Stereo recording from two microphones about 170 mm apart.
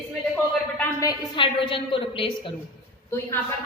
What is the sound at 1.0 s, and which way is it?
A woman's voice, 25° left (ahead or behind).